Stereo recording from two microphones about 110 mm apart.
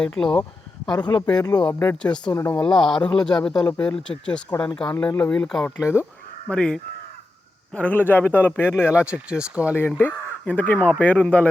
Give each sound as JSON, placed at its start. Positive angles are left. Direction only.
{"t": 0.0, "sound": "speech", "side_deg": 5}
{"t": 0.9, "sound": "speech", "side_deg": 40}
{"t": 2.0, "sound": "speech", "side_deg": 10}
{"t": 2.2, "sound": "speech", "side_deg": 30}
{"t": 2.6, "sound": "speech", "side_deg": 5}
{"t": 5.8, "sound": "speech", "side_deg": -10}
{"t": 6.5, "sound": "speech", "side_deg": 10}
{"t": 9.0, "sound": "speech", "side_deg": -10}
{"t": 9.7, "sound": "speech", "side_deg": 20}